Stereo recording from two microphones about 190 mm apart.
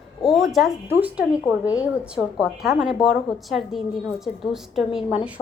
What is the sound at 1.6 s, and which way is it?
Speech, 20° left (ahead or behind).